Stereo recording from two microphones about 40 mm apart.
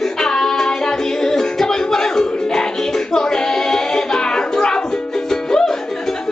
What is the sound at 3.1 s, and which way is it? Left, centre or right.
Child singing, centre.